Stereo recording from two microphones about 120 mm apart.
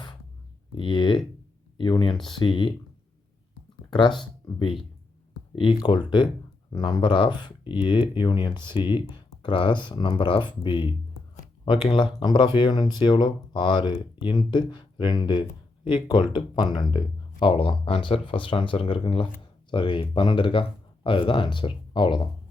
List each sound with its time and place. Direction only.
0.8 s a sound: 45° left (ahead or behind)
1.8 s speech: 40° left (ahead or behind)
3.8 s speech: 40° left (ahead or behind)
5.7 s speech: 40° left (ahead or behind)